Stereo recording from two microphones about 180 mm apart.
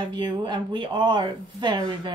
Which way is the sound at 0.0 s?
25° right (ahead or behind).